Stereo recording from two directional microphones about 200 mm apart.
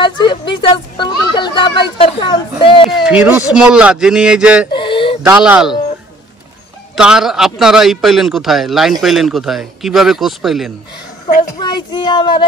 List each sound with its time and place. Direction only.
0.0 s speech: 25° left (ahead or behind)
2.9 s a man's voice: 5° right (ahead or behind)
4.7 s a sound: 25° left (ahead or behind)
5.2 s a man's voice: 5° right (ahead or behind)
7.0 s a man's voice: 5° right (ahead or behind)
11.6 s speech: 20° left (ahead or behind)